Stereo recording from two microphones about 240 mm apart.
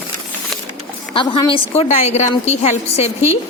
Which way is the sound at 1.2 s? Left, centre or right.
Centre.